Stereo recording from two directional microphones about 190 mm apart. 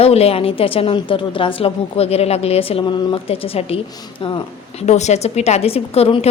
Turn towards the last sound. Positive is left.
turn(degrees=30)  # may be behind; listen again after turning